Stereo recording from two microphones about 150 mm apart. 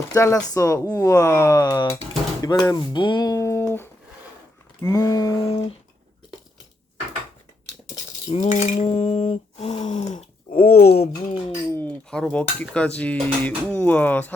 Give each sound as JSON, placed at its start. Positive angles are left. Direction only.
{"t": 0.1, "sound": "speech", "side_deg": 15}
{"t": 2.4, "sound": "a sound", "side_deg": 25}
{"t": 4.8, "sound": "speech", "side_deg": 15}
{"t": 8.3, "sound": "speech", "side_deg": 50}
{"t": 11.7, "sound": "speech", "side_deg": 10}